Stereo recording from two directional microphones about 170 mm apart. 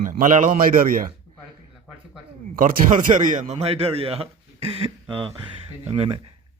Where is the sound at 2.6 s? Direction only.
50° right (ahead or behind).